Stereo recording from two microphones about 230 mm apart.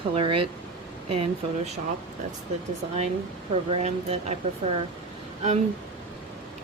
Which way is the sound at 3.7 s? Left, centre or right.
Right.